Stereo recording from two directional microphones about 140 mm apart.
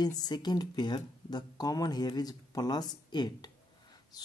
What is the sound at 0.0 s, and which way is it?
Speech, 30° left (ahead or behind).